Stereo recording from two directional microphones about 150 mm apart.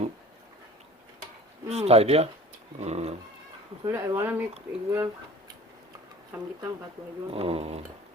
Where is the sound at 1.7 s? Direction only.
45° right (ahead or behind).